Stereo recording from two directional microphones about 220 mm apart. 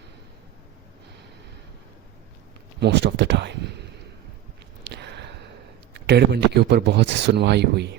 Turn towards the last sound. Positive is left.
turn(degrees=-50)  # may be behind; listen again after turning